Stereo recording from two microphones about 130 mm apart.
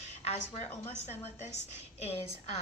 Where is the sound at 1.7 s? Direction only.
50° left (ahead or behind).